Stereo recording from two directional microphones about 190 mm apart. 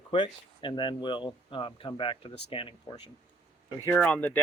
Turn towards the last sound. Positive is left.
turn(degrees=5)  # may be behind; listen again after turning